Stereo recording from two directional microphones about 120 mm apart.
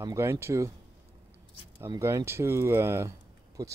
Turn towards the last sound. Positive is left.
turn(degrees=-25)  # may be behind; listen again after turning